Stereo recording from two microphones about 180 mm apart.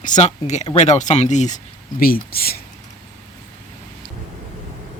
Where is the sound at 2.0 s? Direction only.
55° left (ahead or behind).